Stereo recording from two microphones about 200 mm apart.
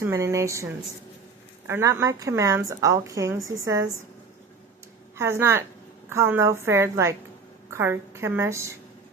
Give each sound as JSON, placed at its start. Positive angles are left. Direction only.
{"t": 0.0, "sound": "a woman's voice", "side_deg": -15}
{"t": 5.1, "sound": "a woman's voice", "side_deg": -10}